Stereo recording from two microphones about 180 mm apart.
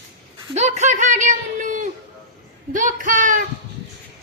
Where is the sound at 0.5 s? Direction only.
40° right (ahead or behind).